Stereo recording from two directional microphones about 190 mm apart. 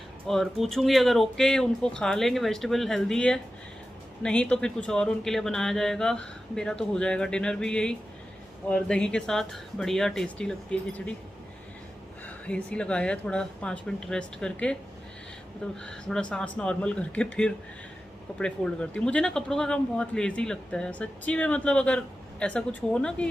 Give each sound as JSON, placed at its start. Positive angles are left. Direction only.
{"t": 0.3, "sound": "speech", "side_deg": 0}
{"t": 12.2, "sound": "speech", "side_deg": 5}